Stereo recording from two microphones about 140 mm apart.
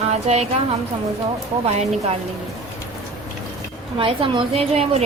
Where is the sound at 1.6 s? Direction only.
50° right (ahead or behind).